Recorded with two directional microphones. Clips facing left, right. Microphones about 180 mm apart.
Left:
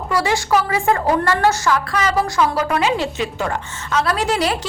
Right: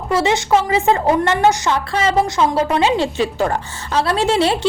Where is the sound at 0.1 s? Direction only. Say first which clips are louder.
Right 3 dB; 25° right (ahead or behind).